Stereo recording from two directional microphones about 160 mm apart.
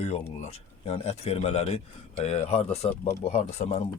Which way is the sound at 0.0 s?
40° left (ahead or behind).